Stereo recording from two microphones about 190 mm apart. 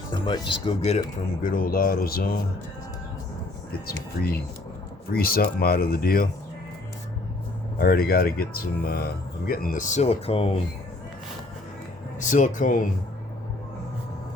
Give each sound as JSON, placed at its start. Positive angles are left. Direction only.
{"t": 0.1, "sound": "speech", "side_deg": 25}
{"t": 1.5, "sound": "speech", "side_deg": 50}
{"t": 3.7, "sound": "speech", "side_deg": 55}
{"t": 7.8, "sound": "speech", "side_deg": 50}
{"t": 12.2, "sound": "speech", "side_deg": 40}